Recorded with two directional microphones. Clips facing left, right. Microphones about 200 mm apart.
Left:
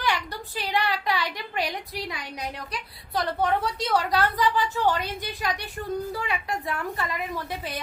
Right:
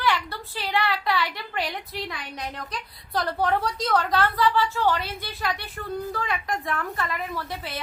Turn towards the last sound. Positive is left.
turn(degrees=15)  # may be behind; listen again after turning